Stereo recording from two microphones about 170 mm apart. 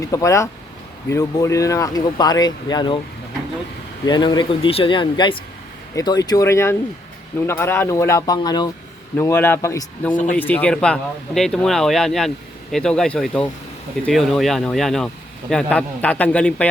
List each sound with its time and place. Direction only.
0.0 s speech: 20° left (ahead or behind)
4.0 s speech: 25° left (ahead or behind)
9.1 s speech: 15° left (ahead or behind)